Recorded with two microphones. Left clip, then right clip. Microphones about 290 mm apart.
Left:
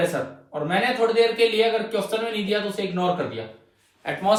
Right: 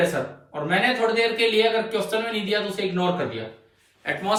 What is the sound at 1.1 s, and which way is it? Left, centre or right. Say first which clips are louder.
A man's voice: left 1 dB; centre.